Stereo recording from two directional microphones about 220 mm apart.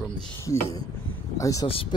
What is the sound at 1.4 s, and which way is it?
Speech, 15° left (ahead or behind).